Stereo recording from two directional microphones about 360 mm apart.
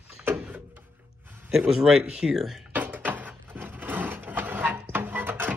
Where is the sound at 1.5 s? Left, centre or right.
Centre.